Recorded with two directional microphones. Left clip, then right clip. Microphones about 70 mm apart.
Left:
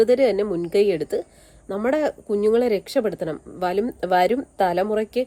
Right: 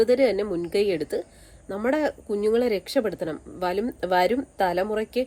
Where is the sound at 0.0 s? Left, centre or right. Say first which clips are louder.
Left 3 dB; left.